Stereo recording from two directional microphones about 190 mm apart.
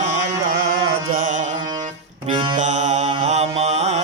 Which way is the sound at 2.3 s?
25° right (ahead or behind).